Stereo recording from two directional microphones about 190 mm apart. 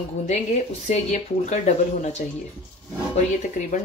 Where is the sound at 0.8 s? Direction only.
35° left (ahead or behind).